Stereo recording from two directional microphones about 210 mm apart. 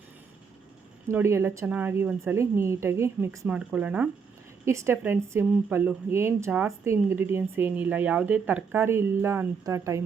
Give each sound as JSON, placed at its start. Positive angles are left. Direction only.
{"t": 1.0, "sound": "speech", "side_deg": -15}